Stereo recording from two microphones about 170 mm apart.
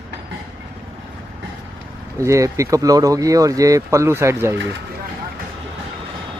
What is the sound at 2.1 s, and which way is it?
Speech, 20° right (ahead or behind).